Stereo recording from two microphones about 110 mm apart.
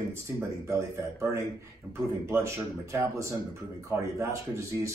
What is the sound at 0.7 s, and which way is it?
Speech, 25° right (ahead or behind).